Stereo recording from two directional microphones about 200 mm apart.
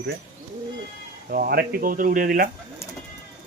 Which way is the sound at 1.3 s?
50° right (ahead or behind).